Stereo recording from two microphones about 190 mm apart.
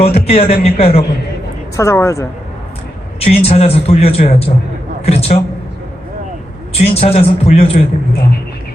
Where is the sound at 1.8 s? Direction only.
15° left (ahead or behind).